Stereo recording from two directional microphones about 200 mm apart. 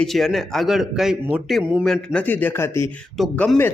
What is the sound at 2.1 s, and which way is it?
Speech, 10° left (ahead or behind).